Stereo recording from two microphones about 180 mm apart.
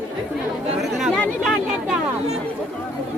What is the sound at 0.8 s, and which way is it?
Chatter, centre (ahead or behind).